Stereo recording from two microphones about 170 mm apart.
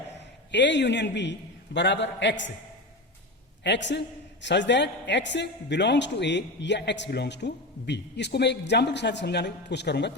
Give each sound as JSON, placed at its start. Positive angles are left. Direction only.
{"t": 0.5, "sound": "a man's voice", "side_deg": 90}
{"t": 3.6, "sound": "a man's voice", "side_deg": 90}